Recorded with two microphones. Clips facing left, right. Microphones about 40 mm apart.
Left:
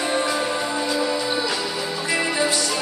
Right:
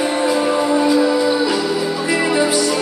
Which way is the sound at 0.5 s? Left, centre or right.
Right.